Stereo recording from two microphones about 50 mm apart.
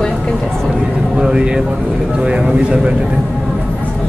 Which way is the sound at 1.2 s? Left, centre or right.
Centre.